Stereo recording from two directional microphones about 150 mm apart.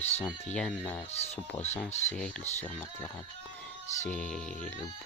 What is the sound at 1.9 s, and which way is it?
Speech, 50° left (ahead or behind).